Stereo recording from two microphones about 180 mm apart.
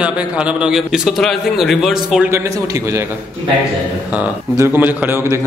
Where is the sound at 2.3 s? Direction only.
15° right (ahead or behind).